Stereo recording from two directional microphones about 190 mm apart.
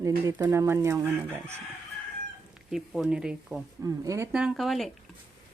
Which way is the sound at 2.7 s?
Centre (ahead or behind).